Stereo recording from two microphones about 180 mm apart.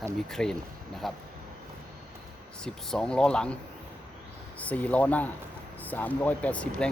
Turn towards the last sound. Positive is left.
turn(degrees=5)  # may be behind; listen again after turning